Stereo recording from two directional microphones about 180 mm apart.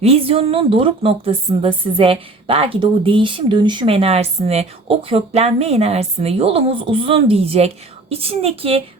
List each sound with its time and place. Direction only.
0.0 s a woman's voice: 35° right (ahead or behind)